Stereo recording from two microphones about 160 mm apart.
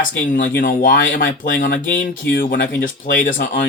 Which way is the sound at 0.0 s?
60° left (ahead or behind).